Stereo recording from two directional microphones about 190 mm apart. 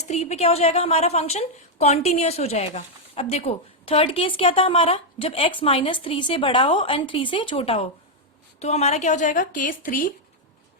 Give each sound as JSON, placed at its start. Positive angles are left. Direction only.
{"t": 0.0, "sound": "a woman's voice", "side_deg": 35}